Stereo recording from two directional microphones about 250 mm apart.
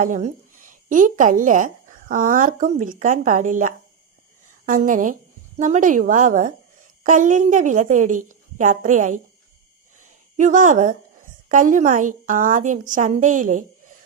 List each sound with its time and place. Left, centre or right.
0.0 s a woman's voice: right
10.3 s a woman's voice: right